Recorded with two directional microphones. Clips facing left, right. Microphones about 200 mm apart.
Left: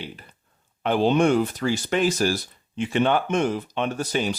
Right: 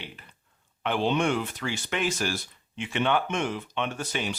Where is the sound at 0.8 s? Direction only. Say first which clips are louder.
Left 6 dB; 40° left (ahead or behind).